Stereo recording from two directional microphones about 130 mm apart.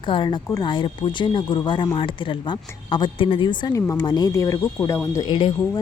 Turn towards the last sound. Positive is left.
turn(degrees=40)  # may be behind; listen again after turning